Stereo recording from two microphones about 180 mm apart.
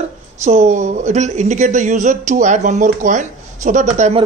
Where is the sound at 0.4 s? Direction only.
40° right (ahead or behind).